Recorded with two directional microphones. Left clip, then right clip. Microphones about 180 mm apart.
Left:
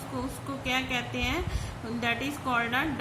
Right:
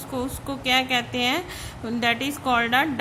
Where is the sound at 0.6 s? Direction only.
55° right (ahead or behind).